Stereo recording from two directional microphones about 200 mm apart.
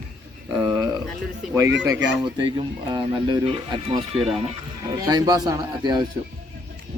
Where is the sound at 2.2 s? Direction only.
25° right (ahead or behind).